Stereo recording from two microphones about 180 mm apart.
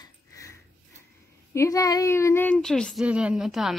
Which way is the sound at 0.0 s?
15° left (ahead or behind).